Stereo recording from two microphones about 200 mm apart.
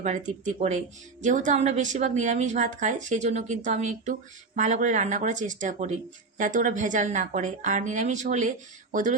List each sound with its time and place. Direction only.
0.4 s a woman's voice: 35° right (ahead or behind)